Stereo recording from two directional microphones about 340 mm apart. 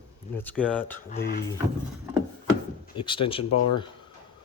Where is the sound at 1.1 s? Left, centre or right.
Left.